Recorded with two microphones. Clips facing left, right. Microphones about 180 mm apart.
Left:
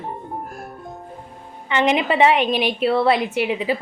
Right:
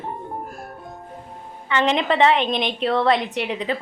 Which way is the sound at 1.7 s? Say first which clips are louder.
Left 1 dB; 15° left (ahead or behind).